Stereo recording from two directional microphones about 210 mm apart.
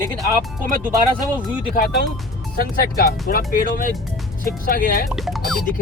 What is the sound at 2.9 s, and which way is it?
Speech, 45° left (ahead or behind).